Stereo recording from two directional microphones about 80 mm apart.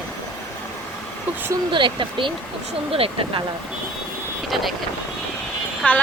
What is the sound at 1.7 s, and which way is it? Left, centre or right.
Speech, right.